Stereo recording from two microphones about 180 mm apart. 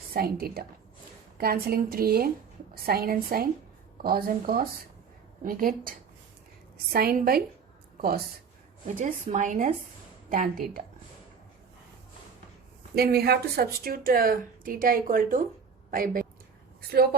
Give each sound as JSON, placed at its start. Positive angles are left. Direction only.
{"t": 0.1, "sound": "a woman's voice", "side_deg": -55}
{"t": 6.9, "sound": "a woman's voice", "side_deg": -55}
{"t": 9.0, "sound": "speech", "side_deg": -45}
{"t": 13.0, "sound": "a woman's voice", "side_deg": -60}